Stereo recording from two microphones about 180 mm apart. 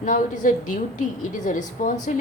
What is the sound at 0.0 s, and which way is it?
A woman's voice, 45° left (ahead or behind).